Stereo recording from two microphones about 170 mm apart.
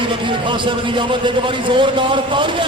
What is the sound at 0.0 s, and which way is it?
A man's voice, 30° right (ahead or behind).